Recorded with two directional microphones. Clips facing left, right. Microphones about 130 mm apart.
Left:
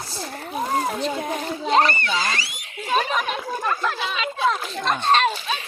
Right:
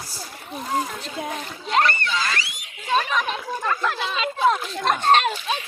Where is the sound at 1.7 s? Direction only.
30° left (ahead or behind).